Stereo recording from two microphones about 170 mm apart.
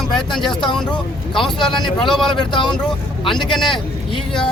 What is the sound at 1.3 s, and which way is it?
Speech, 30° left (ahead or behind).